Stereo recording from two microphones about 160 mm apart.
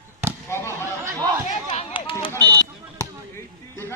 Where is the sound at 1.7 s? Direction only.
35° left (ahead or behind).